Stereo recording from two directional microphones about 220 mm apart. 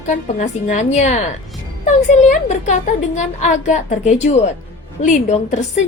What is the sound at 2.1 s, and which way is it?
A woman's voice, 35° left (ahead or behind).